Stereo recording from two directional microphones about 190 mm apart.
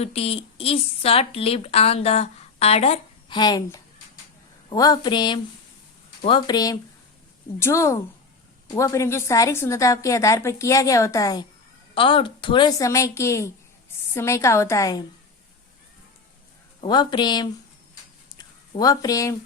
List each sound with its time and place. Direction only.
0.0 s a woman's voice: 30° left (ahead or behind)
16.8 s a woman's voice: 25° left (ahead or behind)
18.3 s a sound: 20° left (ahead or behind)